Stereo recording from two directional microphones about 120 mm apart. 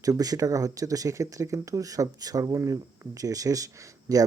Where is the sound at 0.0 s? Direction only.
30° right (ahead or behind).